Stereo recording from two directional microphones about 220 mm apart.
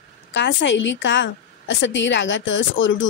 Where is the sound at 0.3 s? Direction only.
55° left (ahead or behind).